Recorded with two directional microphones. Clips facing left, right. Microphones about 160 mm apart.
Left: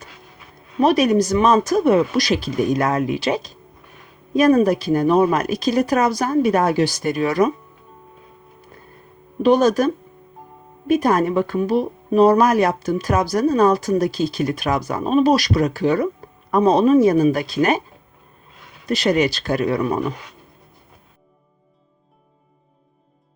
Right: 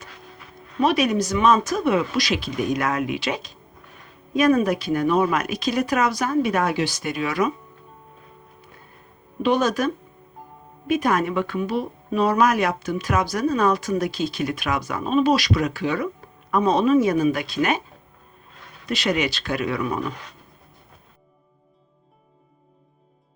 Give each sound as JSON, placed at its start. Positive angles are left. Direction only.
{"t": 0.8, "sound": "speech", "side_deg": 40}
{"t": 9.4, "sound": "speech", "side_deg": 40}
{"t": 18.9, "sound": "speech", "side_deg": 40}